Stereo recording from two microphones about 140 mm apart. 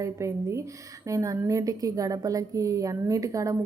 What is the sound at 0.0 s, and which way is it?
A woman's voice, 20° right (ahead or behind).